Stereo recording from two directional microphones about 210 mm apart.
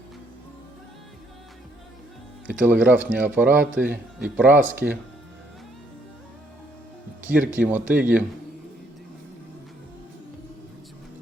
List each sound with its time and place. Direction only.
2.5 s a man's voice: 5° right (ahead or behind)
7.3 s a man's voice: 5° right (ahead or behind)